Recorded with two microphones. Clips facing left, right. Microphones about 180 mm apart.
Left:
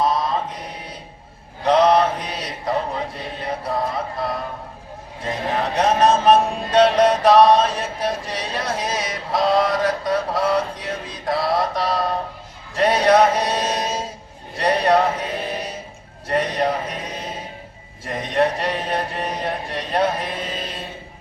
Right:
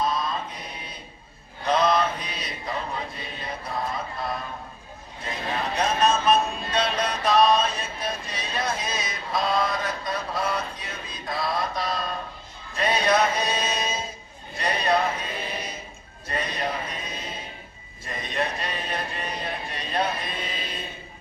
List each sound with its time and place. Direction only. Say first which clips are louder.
0.0 s chant: left 6 dB; 75° left (ahead or behind)
1.6 s mantra: left 7 dB; 80° left
5.5 s music: left 6 dB; 80° left
16.3 s a sound: left 9 dB; 80° left